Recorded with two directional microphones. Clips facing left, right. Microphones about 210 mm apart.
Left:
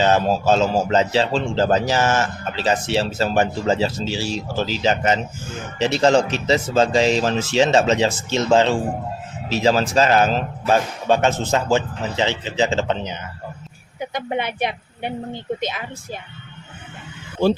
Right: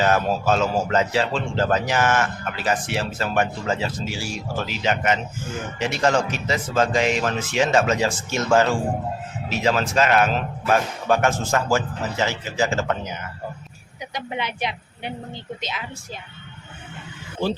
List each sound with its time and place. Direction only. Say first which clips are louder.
0.0 s a man's voice: left 3 dB; 25° left (ahead or behind)
14.0 s a woman's voice: left 5 dB; 50° left (ahead or behind)